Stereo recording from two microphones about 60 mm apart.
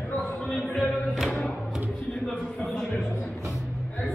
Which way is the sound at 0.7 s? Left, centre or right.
Centre.